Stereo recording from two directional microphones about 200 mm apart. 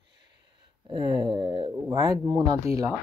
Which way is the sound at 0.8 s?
20° right (ahead or behind).